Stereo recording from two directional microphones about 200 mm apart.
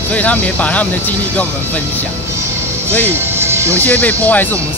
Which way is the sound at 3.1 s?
10° right (ahead or behind).